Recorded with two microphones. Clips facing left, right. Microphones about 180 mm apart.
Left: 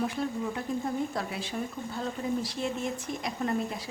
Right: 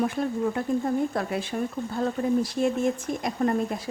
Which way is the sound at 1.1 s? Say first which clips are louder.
Right 6 dB; 55° right (ahead or behind).